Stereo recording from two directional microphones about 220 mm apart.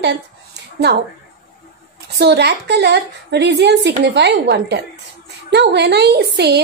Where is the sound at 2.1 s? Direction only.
50° right (ahead or behind).